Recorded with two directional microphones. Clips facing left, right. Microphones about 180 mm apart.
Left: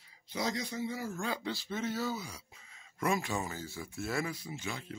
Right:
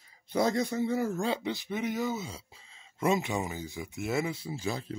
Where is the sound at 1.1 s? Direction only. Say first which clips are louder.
Right 6 dB; 25° right (ahead or behind).